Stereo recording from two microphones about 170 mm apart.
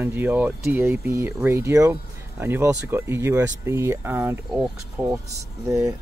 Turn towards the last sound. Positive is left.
turn(degrees=-15)  # may be behind; listen again after turning